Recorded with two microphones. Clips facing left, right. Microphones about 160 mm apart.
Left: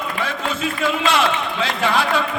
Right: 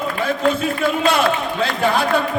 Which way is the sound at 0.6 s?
50° right (ahead or behind).